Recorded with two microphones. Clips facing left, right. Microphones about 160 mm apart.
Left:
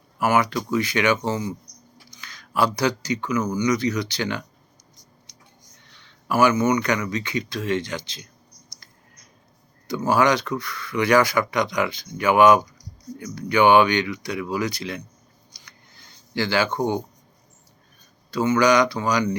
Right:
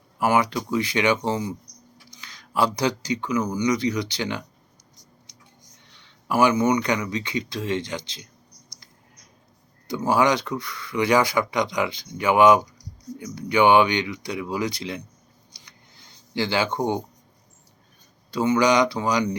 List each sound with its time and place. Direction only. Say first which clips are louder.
0.2 s speech: even; 25° right (ahead or behind)
5.7 s a sound: left 1 dB; 20° right (ahead or behind)
6.7 s speech: left 1 dB; 15° right (ahead or behind)
10.0 s speech: left 1 dB; 20° right (ahead or behind)
15.5 s a sound: left 1 dB; 20° right (ahead or behind)
18.3 s speech: left 1 dB; 15° right (ahead or behind)